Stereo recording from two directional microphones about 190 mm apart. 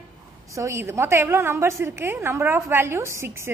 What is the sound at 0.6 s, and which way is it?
A woman's voice, 15° right (ahead or behind).